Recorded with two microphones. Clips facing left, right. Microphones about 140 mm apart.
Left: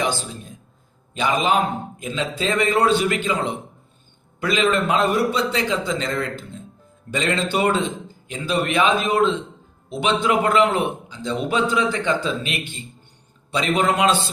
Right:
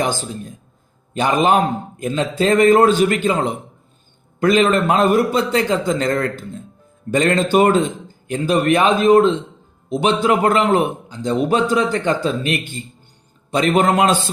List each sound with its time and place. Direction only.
1.1 s a man's voice: 50° right (ahead or behind)